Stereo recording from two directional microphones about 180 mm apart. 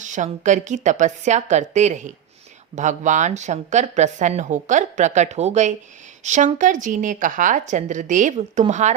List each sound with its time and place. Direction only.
0.0 s a woman's voice: 45° right (ahead or behind)